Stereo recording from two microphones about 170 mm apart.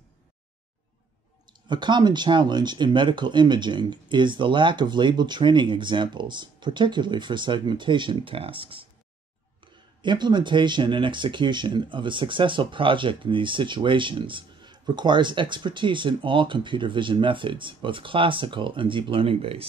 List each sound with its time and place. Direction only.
1.7 s speech: 25° right (ahead or behind)
10.0 s speech: 25° right (ahead or behind)